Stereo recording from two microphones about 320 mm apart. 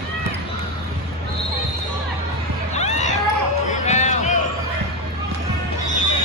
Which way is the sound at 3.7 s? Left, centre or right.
Left.